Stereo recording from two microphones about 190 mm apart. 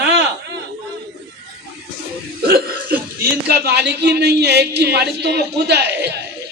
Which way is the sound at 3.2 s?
55° right (ahead or behind).